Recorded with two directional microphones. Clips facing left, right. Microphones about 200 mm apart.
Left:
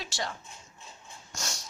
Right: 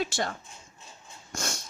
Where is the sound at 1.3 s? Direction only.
55° right (ahead or behind).